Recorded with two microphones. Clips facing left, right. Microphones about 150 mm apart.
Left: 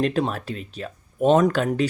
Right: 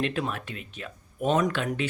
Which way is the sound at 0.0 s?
40° left (ahead or behind).